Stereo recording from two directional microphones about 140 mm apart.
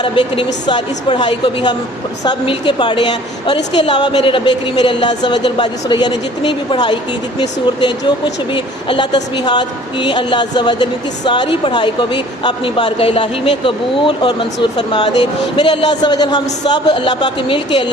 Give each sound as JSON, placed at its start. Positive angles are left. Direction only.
{"t": 0.0, "sound": "a woman's voice", "side_deg": 35}